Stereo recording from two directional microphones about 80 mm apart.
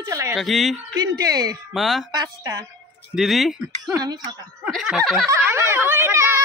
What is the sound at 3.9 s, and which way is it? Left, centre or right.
Speech, right.